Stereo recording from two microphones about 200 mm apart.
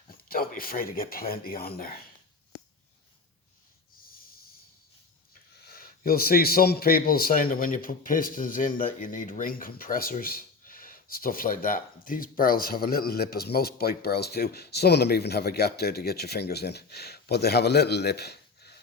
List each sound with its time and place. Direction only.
0.3 s a man's voice: 45° left (ahead or behind)
4.1 s snort: 45° left (ahead or behind)
5.6 s a man's voice: 50° left (ahead or behind)